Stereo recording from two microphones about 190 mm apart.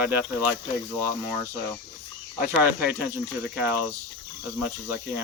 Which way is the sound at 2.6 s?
10° right (ahead or behind).